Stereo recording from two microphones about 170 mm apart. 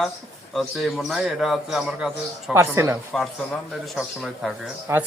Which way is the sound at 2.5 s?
15° right (ahead or behind).